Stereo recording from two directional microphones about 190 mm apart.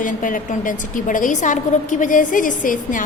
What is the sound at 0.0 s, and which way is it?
A woman's voice, 45° left (ahead or behind).